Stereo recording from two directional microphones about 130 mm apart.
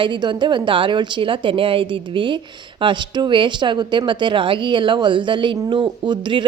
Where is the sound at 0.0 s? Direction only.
35° right (ahead or behind).